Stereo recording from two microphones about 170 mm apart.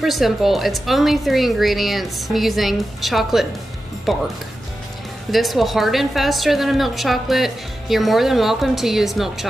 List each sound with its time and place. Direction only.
0.0 s a woman's voice: centre (ahead or behind)
5.3 s a woman's voice: centre (ahead or behind)